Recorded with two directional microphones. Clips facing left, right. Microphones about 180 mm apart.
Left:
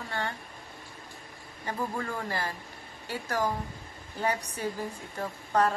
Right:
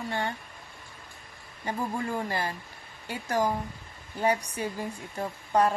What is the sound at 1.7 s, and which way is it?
A woman's voice, 20° right (ahead or behind).